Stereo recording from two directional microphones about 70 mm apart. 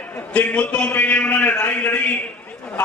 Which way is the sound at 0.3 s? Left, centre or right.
Centre.